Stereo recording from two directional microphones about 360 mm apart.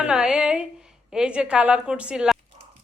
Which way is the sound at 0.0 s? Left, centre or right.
Centre.